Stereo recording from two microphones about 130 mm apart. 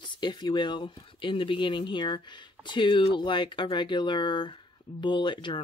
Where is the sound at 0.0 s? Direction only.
35° left (ahead or behind).